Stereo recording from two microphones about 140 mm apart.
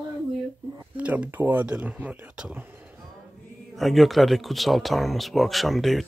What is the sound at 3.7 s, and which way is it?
Speech, centre (ahead or behind).